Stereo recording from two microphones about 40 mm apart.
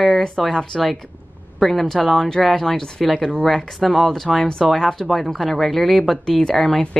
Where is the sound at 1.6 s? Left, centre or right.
Centre.